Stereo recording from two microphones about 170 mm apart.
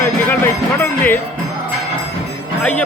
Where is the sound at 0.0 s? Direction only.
15° left (ahead or behind).